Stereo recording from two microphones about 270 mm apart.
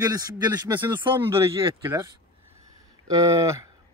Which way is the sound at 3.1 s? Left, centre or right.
Centre.